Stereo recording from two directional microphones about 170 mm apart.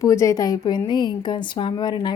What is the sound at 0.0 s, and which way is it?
Speech, 20° left (ahead or behind).